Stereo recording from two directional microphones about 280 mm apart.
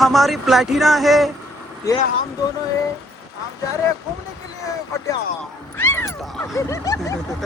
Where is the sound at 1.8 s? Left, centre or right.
Centre.